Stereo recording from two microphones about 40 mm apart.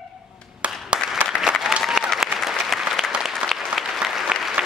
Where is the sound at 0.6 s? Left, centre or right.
Right.